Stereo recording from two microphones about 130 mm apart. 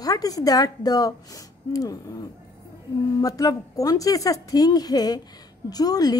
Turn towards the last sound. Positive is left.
turn(degrees=30)  # may be behind; listen again after turning